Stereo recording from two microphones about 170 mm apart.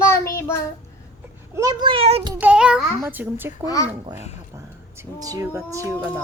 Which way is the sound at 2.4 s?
5° right (ahead or behind).